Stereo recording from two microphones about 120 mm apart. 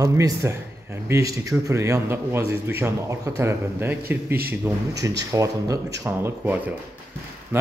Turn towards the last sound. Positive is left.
turn(degrees=-20)  # may be behind; listen again after turning